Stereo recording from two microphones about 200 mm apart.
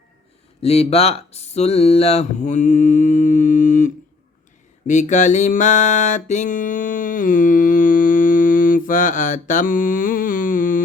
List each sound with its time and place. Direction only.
0.6 s music: 30° left (ahead or behind)